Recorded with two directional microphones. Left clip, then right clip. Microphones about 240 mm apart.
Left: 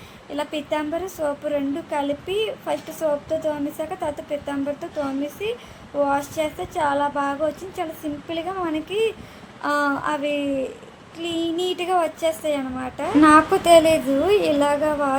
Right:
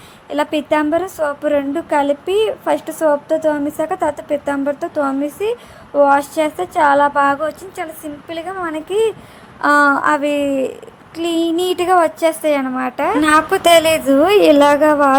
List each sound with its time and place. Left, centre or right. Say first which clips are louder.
0.3 s a woman's voice: right 9 dB; right